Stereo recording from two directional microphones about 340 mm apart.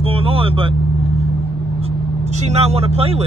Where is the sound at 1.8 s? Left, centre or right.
Centre.